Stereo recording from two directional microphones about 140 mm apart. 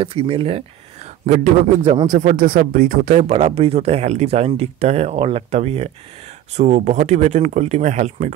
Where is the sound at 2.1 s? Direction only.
75° right (ahead or behind).